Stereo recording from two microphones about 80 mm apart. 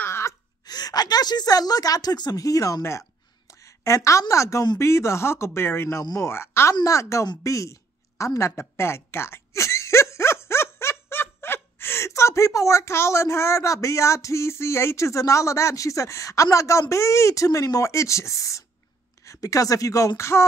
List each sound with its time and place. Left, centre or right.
0.0 s a sound: left
0.7 s speech: left
6.7 s a woman's voice: left